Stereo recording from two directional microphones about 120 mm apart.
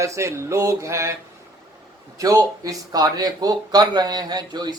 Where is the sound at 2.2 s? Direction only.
30° right (ahead or behind).